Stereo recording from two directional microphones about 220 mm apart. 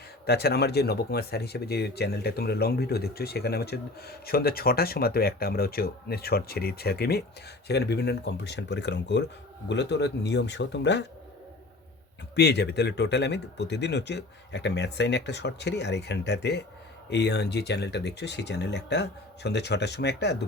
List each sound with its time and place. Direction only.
0.3 s speech: 45° left (ahead or behind)
12.4 s speech: 50° left (ahead or behind)